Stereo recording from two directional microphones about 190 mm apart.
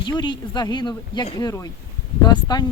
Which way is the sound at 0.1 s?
20° left (ahead or behind).